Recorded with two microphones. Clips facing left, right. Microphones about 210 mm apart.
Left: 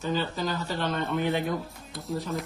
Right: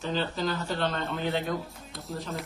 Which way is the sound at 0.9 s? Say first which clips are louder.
Left 3 dB; 15° left (ahead or behind).